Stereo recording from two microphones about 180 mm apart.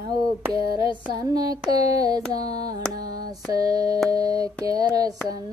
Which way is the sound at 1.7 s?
20° right (ahead or behind).